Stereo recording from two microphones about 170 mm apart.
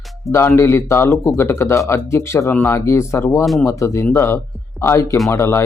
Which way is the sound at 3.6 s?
15° left (ahead or behind).